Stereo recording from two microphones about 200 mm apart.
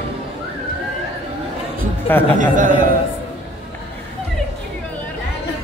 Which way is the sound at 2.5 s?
40° right (ahead or behind).